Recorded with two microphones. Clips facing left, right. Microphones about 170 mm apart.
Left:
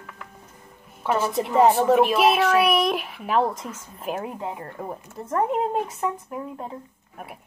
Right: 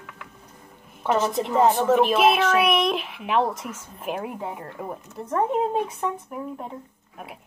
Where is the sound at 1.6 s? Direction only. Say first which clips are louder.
Left 2 dB; 15° left (ahead or behind).